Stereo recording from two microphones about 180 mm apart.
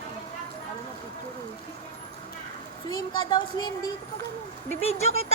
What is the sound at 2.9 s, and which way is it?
Speech, 25° left (ahead or behind).